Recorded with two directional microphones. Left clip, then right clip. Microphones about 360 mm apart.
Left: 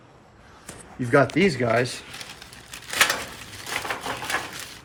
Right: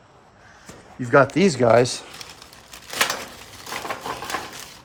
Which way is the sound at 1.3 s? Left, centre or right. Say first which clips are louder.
Right 2 dB; centre.